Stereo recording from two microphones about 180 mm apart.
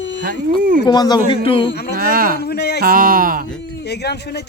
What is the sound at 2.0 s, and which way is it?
Speech, 50° right (ahead or behind).